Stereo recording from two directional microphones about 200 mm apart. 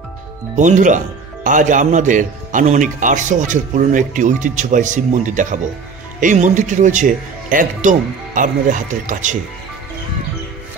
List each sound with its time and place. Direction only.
0.6 s a man's voice: 40° right (ahead or behind)